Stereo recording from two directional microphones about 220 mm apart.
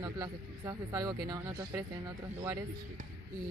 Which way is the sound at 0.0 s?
15° right (ahead or behind).